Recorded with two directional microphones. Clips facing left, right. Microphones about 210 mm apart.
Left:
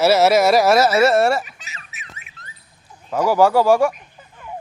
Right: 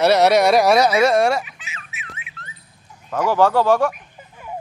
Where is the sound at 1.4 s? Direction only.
40° left (ahead or behind).